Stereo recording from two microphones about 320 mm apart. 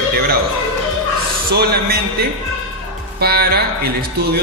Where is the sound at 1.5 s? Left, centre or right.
Right.